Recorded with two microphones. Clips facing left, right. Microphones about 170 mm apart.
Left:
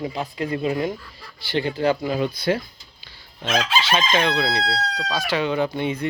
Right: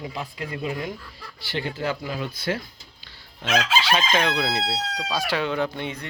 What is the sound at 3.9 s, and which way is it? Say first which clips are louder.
Speech: left 5 dB; 5° right (ahead or behind).